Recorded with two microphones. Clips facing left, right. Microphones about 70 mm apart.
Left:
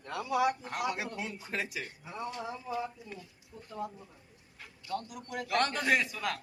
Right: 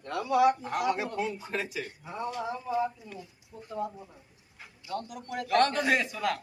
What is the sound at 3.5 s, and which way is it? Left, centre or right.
Speech, right.